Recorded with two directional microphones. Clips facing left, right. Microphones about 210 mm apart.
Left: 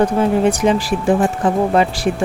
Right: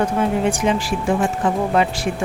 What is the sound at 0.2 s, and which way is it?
Speech, 35° left (ahead or behind).